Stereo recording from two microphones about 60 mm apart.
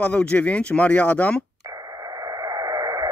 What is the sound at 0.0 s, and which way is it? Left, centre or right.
Speech, left.